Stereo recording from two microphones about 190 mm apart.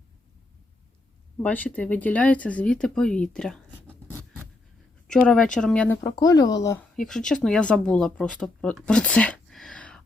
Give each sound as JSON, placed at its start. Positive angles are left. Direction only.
{"t": 1.4, "sound": "speech", "side_deg": 10}
{"t": 5.5, "sound": "speech", "side_deg": 5}
{"t": 6.0, "sound": "speech", "side_deg": 20}
{"t": 6.9, "sound": "speech", "side_deg": 5}
{"t": 8.9, "sound": "a sound", "side_deg": 5}